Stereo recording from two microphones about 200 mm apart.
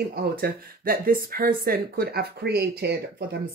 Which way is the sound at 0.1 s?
50° right (ahead or behind).